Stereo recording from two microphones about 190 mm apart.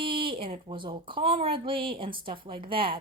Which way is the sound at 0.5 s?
25° right (ahead or behind).